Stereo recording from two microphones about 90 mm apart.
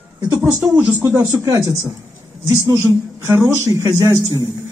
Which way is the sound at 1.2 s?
35° right (ahead or behind).